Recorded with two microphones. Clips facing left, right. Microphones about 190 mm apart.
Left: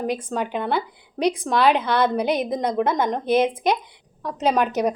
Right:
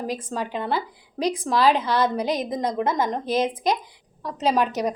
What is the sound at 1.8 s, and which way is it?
A woman's voice, 60° left (ahead or behind).